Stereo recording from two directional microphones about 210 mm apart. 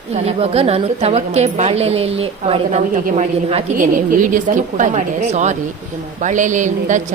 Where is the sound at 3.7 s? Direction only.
40° right (ahead or behind).